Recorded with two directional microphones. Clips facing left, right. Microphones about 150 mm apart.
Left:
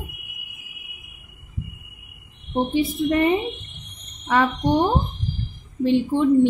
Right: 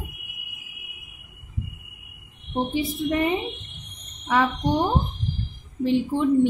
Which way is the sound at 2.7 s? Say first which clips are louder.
Left 5 dB; 60° left (ahead or behind).